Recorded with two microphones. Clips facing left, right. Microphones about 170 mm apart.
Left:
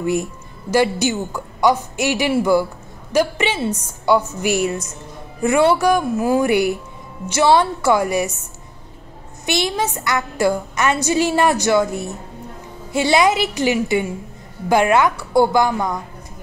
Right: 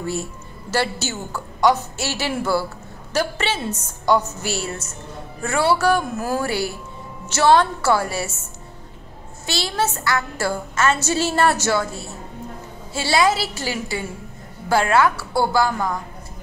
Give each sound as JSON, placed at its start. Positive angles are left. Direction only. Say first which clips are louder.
{"t": 0.0, "sound": "a woman's voice", "louder": "left 6 dB", "side_deg": 15}
{"t": 9.5, "sound": "a woman's voice", "louder": "left 3 dB", "side_deg": 15}